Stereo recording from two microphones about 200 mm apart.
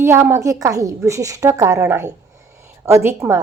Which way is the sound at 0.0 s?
10° right (ahead or behind).